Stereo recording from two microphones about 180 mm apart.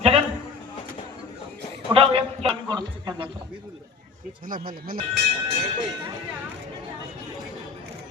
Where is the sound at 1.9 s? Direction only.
30° right (ahead or behind).